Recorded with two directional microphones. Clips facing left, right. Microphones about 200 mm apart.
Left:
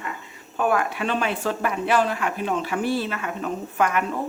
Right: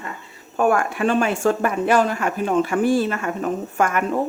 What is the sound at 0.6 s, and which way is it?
Speech, 45° right (ahead or behind).